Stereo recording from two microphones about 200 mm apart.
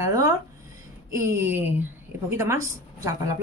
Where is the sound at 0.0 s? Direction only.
15° right (ahead or behind).